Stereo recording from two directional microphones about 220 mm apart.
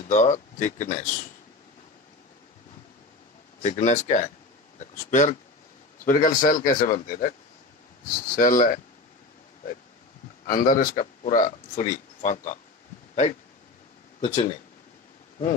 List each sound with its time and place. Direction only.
0.1 s speech: 35° left (ahead or behind)
3.6 s speech: 35° left (ahead or behind)
8.4 s speech: 40° left (ahead or behind)
10.4 s speech: 40° left (ahead or behind)
14.2 s speech: 20° left (ahead or behind)